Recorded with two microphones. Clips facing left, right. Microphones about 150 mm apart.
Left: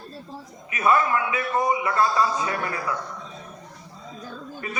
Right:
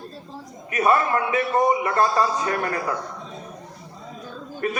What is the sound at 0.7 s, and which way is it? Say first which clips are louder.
A man's voice: right 1 dB; 40° right (ahead or behind).